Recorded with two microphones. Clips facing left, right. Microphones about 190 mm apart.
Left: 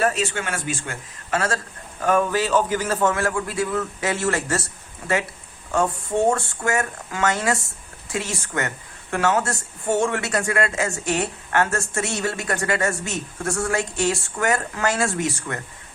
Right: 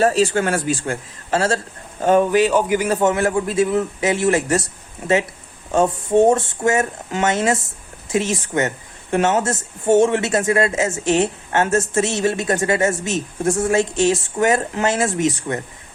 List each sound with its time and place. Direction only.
0.0 s speech: 35° right (ahead or behind)